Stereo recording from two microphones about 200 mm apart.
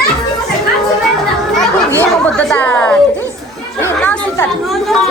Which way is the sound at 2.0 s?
5° left (ahead or behind).